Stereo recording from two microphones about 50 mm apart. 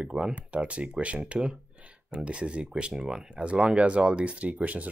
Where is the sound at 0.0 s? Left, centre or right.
Centre.